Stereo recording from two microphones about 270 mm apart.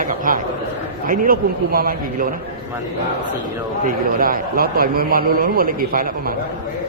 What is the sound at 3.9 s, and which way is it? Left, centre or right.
A man's voice, right.